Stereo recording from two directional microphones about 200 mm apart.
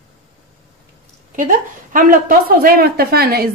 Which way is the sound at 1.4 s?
40° right (ahead or behind).